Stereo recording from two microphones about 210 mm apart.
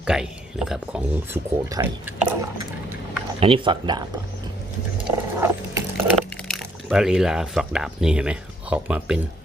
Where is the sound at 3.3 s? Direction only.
25° right (ahead or behind).